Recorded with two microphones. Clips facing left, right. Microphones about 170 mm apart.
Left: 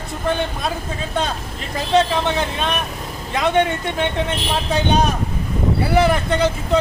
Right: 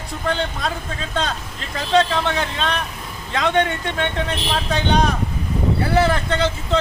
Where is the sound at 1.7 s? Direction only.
20° left (ahead or behind).